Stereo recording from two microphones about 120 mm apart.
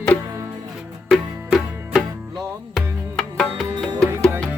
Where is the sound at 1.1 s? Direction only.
Centre (ahead or behind).